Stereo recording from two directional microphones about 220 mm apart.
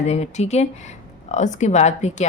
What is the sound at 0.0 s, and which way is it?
A woman's voice, 30° left (ahead or behind).